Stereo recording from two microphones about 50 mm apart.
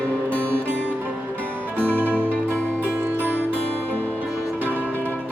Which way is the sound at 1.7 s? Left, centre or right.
Right.